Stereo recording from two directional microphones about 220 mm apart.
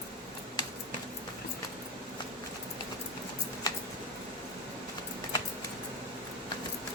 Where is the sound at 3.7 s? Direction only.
15° left (ahead or behind).